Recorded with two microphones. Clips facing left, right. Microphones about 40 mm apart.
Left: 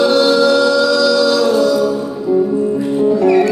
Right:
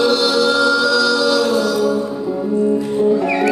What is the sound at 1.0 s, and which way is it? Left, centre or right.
A capella, centre.